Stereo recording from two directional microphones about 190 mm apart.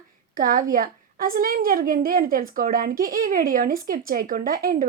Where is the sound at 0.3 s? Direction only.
45° right (ahead or behind).